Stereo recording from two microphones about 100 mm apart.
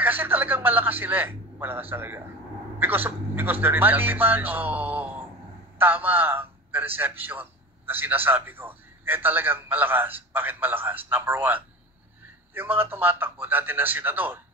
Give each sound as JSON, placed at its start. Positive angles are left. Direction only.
{"t": 0.0, "sound": "a man's voice", "side_deg": -20}